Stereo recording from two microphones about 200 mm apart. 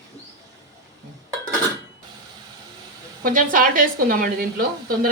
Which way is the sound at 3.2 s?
45° right (ahead or behind).